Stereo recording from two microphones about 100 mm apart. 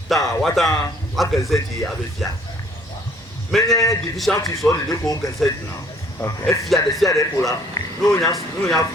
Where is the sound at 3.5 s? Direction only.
Centre (ahead or behind).